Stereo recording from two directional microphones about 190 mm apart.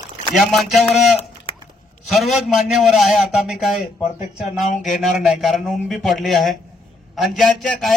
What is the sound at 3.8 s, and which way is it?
Speech, 40° left (ahead or behind).